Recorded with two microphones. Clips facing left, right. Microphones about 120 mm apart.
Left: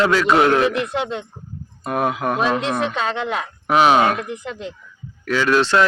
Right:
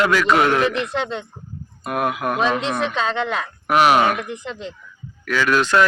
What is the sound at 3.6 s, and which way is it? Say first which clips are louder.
Speech: left 1 dB; 25° left (ahead or behind).